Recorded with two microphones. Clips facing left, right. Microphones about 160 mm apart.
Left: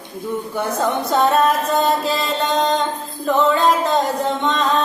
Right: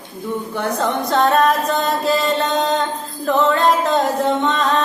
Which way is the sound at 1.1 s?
5° left (ahead or behind).